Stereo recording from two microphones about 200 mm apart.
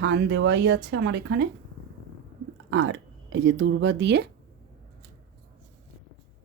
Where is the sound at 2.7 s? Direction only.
75° right (ahead or behind).